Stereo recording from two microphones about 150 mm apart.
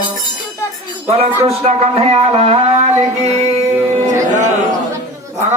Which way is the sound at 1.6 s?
45° right (ahead or behind).